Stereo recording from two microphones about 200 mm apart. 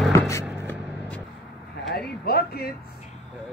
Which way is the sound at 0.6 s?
10° left (ahead or behind).